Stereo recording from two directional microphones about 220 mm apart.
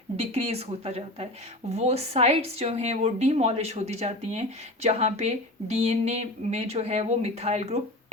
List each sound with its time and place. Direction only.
0.2 s a woman's voice: 30° right (ahead or behind)